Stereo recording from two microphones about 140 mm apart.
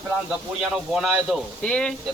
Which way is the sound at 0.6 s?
Centre (ahead or behind).